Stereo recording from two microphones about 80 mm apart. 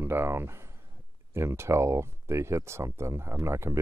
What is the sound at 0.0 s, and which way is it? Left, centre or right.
Speech, right.